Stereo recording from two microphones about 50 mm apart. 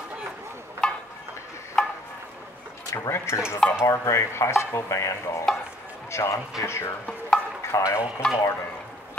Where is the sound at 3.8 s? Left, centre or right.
Left.